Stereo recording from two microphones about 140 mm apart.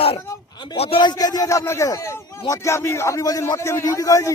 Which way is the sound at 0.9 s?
30° left (ahead or behind).